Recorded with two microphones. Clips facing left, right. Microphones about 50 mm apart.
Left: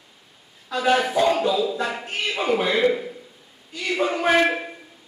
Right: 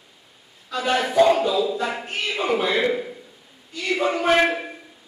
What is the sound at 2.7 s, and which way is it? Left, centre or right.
Speech, centre.